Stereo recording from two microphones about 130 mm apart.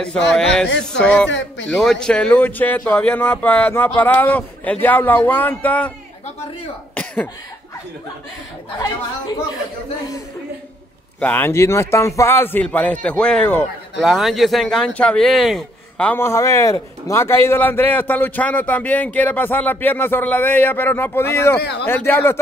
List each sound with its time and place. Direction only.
0.0 s a man's voice: 5° left (ahead or behind)
11.1 s a man's voice: 15° left (ahead or behind)
14.0 s speech: centre (ahead or behind)
16.2 s a man's voice: 20° left (ahead or behind)